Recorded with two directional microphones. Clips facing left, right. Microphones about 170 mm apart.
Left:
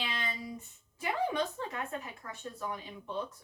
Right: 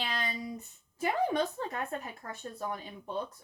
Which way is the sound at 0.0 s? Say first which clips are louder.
Right 2 dB; 40° right (ahead or behind).